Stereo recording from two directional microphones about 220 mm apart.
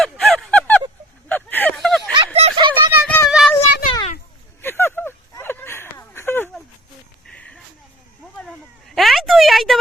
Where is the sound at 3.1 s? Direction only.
Centre (ahead or behind).